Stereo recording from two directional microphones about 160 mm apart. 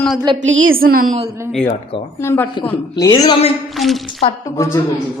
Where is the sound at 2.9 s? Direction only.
25° left (ahead or behind).